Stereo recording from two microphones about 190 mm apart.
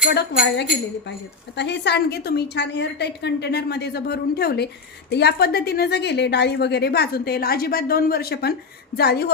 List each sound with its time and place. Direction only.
0.1 s a woman's voice: 55° left (ahead or behind)